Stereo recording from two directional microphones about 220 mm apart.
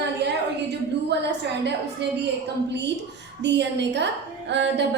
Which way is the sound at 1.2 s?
50° right (ahead or behind).